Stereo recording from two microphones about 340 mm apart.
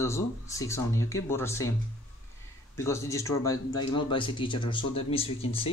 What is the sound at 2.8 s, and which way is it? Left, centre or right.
Speech, centre.